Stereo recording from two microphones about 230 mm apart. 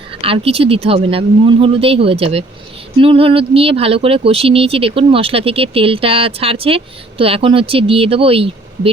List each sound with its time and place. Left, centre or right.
0.1 s speech: right